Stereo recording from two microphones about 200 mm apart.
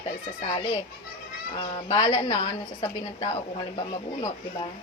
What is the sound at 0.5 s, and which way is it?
A woman's voice, 25° left (ahead or behind).